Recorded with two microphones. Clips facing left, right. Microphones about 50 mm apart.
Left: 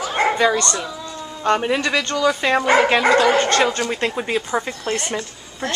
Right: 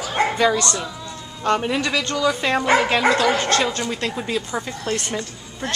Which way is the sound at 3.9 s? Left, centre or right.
Left.